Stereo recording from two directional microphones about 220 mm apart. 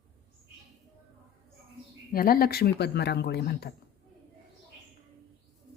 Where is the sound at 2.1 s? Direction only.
40° left (ahead or behind).